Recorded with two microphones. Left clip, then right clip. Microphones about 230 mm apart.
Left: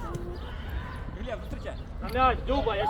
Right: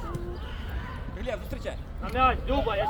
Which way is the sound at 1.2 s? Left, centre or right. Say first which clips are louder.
Right 4 dB; right.